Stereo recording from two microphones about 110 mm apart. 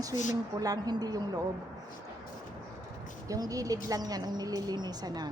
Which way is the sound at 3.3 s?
30° right (ahead or behind).